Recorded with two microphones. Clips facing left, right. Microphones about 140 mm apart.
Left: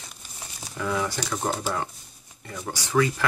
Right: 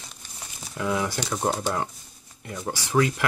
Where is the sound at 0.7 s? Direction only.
10° right (ahead or behind).